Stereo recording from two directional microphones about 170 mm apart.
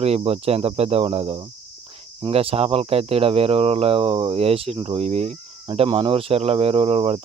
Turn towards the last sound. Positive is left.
turn(degrees=-35)  # may be behind; listen again after turning